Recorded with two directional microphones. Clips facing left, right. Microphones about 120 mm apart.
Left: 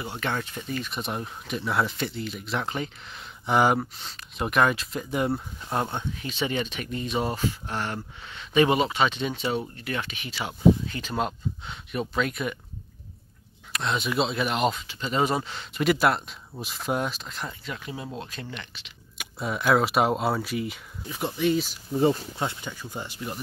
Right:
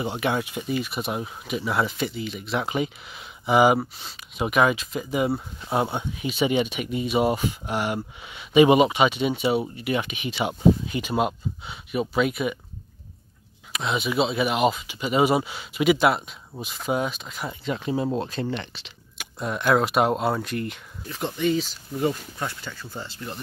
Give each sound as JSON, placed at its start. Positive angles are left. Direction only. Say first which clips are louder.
{"t": 0.0, "sound": "speech", "louder": "right 5 dB", "side_deg": -15}
{"t": 13.7, "sound": "speech", "louder": "right 2 dB", "side_deg": 0}
{"t": 17.5, "sound": "speech", "louder": "right 9 dB", "side_deg": -25}
{"t": 19.1, "sound": "speech", "louder": "right 1 dB", "side_deg": 0}
{"t": 21.9, "sound": "speech", "louder": "left 3 dB", "side_deg": 25}